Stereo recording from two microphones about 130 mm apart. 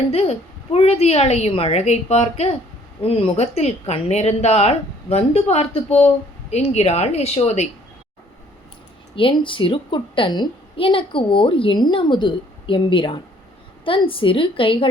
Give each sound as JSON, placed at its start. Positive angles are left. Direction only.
{"t": 0.1, "sound": "a woman's voice", "side_deg": 55}
{"t": 9.1, "sound": "a woman's voice", "side_deg": 40}